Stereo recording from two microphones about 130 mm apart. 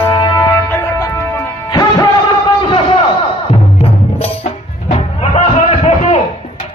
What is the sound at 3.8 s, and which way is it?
Music, 50° left (ahead or behind).